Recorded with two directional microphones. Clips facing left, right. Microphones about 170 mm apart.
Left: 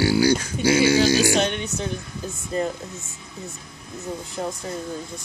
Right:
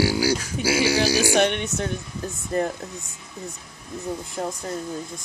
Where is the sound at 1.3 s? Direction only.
70° right (ahead or behind).